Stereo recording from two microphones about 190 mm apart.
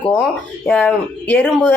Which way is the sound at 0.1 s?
5° left (ahead or behind).